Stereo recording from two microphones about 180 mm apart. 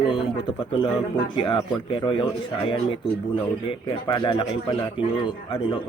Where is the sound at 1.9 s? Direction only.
30° left (ahead or behind).